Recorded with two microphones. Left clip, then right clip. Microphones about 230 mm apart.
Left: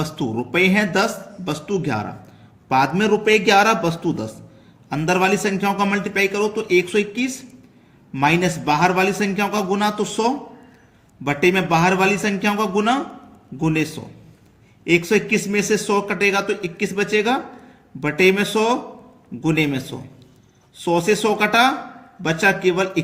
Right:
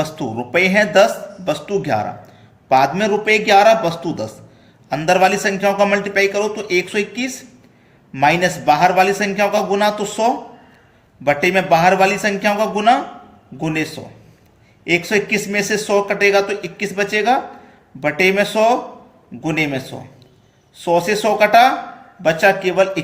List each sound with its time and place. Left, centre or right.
0.0 s a man's voice: left